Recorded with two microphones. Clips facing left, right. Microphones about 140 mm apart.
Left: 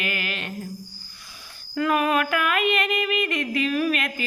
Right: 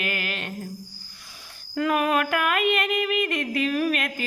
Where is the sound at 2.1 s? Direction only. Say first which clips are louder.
Even; 45° right (ahead or behind).